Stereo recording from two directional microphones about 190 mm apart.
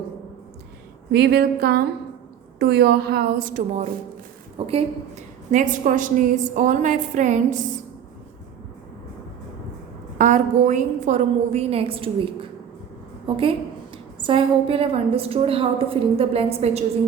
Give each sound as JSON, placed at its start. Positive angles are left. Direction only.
{"t": 1.1, "sound": "a woman's voice", "side_deg": -60}
{"t": 4.5, "sound": "a woman's voice", "side_deg": -30}
{"t": 10.2, "sound": "a woman's voice", "side_deg": -40}